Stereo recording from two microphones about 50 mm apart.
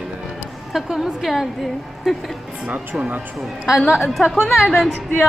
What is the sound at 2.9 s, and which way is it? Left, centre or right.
Speech, centre.